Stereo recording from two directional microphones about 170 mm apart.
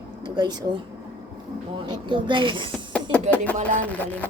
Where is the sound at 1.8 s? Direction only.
30° right (ahead or behind).